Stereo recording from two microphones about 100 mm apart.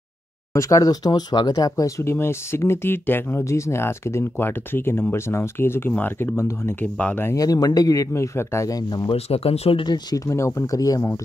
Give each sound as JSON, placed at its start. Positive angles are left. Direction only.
{"t": 0.5, "sound": "speech", "side_deg": 35}
{"t": 7.3, "sound": "speech", "side_deg": 40}
{"t": 9.1, "sound": "speech", "side_deg": 80}
{"t": 9.8, "sound": "speech", "side_deg": 40}